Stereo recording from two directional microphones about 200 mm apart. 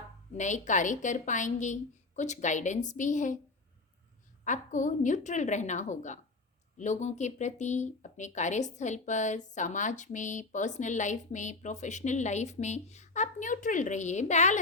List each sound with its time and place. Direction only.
0.3 s speech: 35° left (ahead or behind)
4.4 s speech: 40° left (ahead or behind)